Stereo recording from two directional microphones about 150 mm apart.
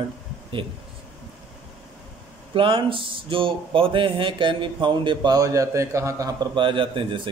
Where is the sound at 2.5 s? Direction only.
35° right (ahead or behind).